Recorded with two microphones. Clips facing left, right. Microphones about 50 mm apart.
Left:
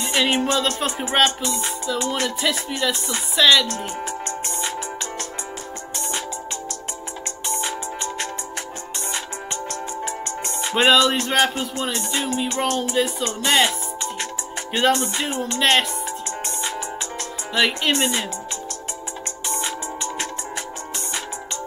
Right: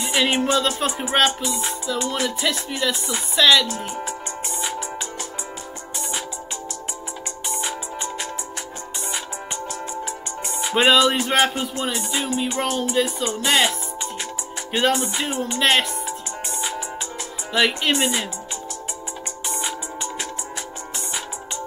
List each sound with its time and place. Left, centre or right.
0.0 s music: centre
3.6 s speech: left
7.4 s music: centre
10.4 s music: centre
19.4 s music: centre